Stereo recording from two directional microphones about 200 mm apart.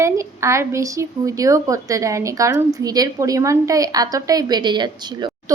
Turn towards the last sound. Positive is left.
turn(degrees=-20)  # may be behind; listen again after turning